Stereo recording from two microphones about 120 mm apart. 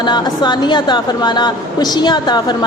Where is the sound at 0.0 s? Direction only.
40° left (ahead or behind).